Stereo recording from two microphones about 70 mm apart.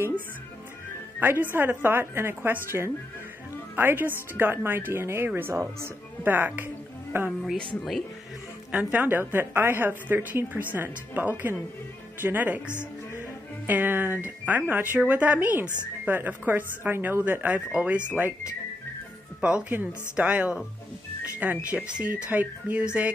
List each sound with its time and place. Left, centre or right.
1.2 s speech: right
8.7 s a woman's voice: right
19.7 s a woman's voice: right
21.6 s a woman's voice: right